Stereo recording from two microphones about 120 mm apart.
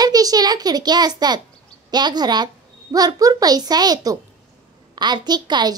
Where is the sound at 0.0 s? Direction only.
30° right (ahead or behind).